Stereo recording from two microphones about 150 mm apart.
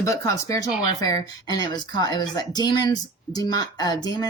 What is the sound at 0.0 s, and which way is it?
Speech, 20° left (ahead or behind).